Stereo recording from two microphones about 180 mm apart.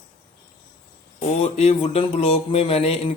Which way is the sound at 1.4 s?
35° left (ahead or behind).